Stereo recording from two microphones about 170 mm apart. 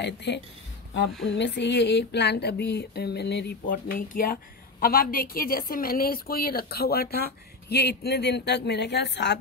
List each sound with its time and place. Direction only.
0.0 s speech: 90° left
3.6 s a woman's voice: 55° left (ahead or behind); by 9.4 s 85° left